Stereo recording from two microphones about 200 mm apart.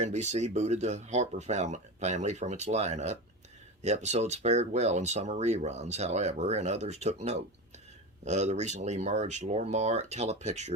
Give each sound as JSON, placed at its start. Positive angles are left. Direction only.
{"t": 0.0, "sound": "speech", "side_deg": -35}